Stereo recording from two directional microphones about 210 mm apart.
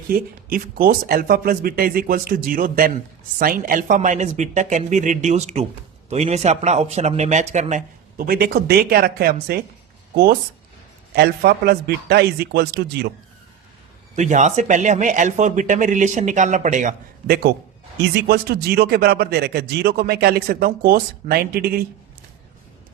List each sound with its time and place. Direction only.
0.1 s speech: 45° right (ahead or behind)
8.3 s speech: 50° right (ahead or behind)
11.1 s speech: 50° right (ahead or behind)
14.2 s speech: 35° right (ahead or behind)